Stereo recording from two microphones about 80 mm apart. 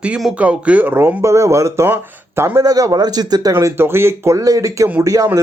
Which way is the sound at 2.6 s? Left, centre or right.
Right.